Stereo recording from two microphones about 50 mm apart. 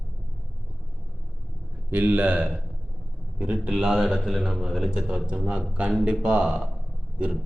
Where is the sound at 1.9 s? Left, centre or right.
Right.